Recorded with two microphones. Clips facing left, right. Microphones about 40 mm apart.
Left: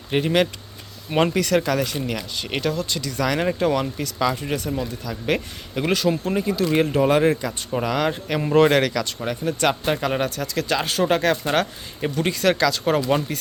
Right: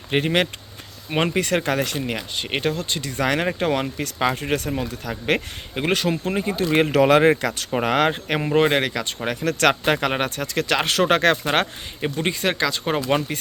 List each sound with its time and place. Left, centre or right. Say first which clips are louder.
0.1 s speech: even; right
1.1 s speech: left 2 dB; right
1.8 s speech: even; right
2.0 s speech: right 1 dB; right
6.9 s speech: right 3 dB; right
8.4 s speech: left 3 dB; centre
9.2 s speech: right 4 dB; right
11.4 s speech: even; right
12.0 s speech: left 2 dB; right